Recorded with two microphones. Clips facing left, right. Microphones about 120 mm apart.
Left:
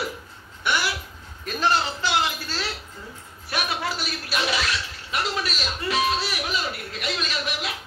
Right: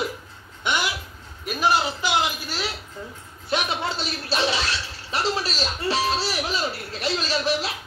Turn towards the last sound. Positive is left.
turn(degrees=-30)  # may be behind; listen again after turning